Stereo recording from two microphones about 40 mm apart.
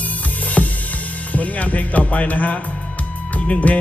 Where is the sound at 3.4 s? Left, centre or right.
Left.